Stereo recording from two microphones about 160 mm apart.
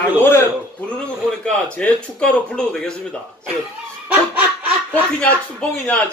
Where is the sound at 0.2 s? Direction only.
15° left (ahead or behind).